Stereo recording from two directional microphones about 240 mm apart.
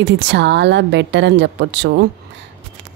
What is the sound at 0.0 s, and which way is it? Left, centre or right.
Speech, right.